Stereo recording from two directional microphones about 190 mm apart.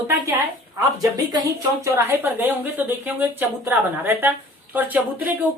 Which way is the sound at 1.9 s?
10° right (ahead or behind).